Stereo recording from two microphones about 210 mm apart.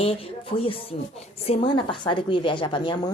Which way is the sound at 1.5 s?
25° left (ahead or behind).